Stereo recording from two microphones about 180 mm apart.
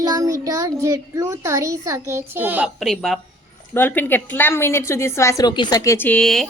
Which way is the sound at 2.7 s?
Centre (ahead or behind).